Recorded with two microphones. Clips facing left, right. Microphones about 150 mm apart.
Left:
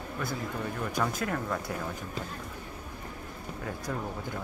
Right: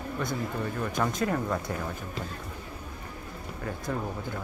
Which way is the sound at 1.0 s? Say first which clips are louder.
Right 4 dB; 5° right (ahead or behind).